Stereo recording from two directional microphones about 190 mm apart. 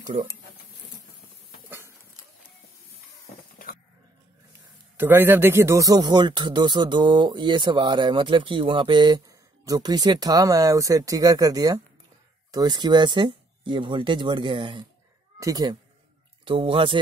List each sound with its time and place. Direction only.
1.7 s bird: 15° right (ahead or behind)
4.9 s a man's voice: 10° right (ahead or behind); by 17.0 s 30° right (ahead or behind)